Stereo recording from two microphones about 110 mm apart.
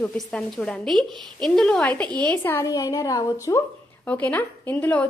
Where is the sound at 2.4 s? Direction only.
20° left (ahead or behind).